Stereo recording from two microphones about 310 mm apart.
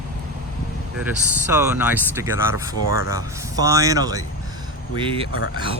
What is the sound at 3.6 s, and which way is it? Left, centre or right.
Speech, centre.